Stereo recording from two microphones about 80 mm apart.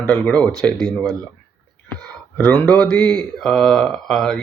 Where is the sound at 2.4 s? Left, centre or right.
Left.